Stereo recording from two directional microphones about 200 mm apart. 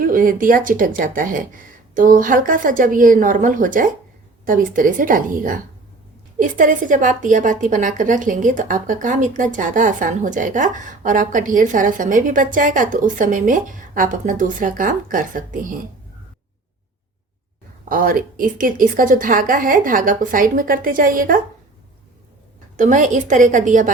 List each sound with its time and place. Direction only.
0.0 s a woman's voice: 45° right (ahead or behind)
17.8 s a woman's voice: 45° right (ahead or behind)
22.8 s a woman's voice: 40° right (ahead or behind)